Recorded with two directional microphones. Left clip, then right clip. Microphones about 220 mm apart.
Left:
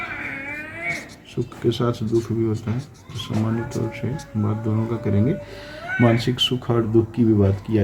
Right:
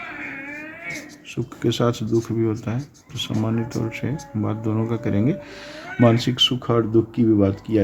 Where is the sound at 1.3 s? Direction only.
40° right (ahead or behind).